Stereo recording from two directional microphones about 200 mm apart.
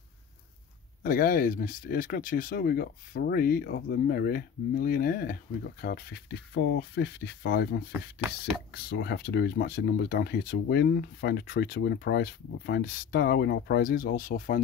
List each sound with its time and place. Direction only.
1.0 s speech: 45° left (ahead or behind)